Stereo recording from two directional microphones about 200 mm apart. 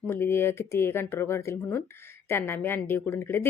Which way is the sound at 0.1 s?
10° left (ahead or behind).